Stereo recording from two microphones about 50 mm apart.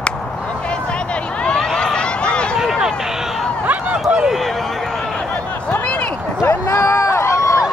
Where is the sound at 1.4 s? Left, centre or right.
Centre.